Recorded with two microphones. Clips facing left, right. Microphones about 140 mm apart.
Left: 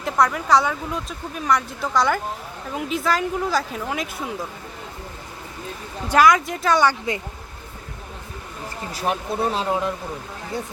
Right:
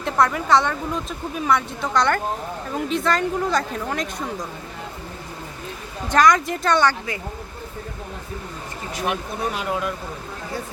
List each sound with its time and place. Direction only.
0.0 s speech: centre (ahead or behind)
6.1 s speech: 5° left (ahead or behind)
9.0 s speech: 30° left (ahead or behind)